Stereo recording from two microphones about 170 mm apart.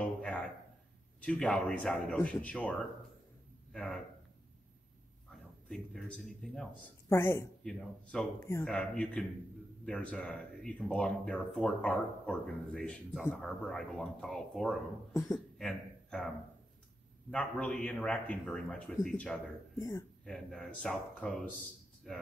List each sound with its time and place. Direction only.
0.0 s a sound: 10° left (ahead or behind)
1.2 s speech: 5° left (ahead or behind)
3.7 s speech: 5° left (ahead or behind)
5.3 s a man's voice: centre (ahead or behind)
7.1 s speech: 15° left (ahead or behind)
19.8 s speech: 15° left (ahead or behind)
20.2 s speech: 5° left (ahead or behind)